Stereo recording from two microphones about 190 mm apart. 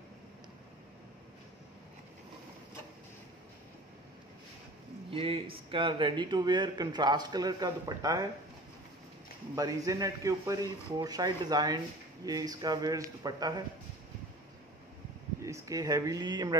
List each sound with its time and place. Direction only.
5.1 s a man's voice: 30° right (ahead or behind)
9.6 s a man's voice: 15° right (ahead or behind)
15.4 s speech: 15° right (ahead or behind)